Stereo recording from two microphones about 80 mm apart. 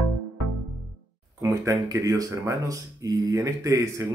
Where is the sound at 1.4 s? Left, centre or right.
Right.